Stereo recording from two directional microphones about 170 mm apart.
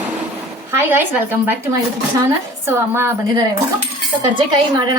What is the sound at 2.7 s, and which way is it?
Speech, 15° right (ahead or behind).